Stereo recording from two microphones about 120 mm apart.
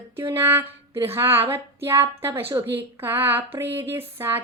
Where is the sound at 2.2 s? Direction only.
20° right (ahead or behind).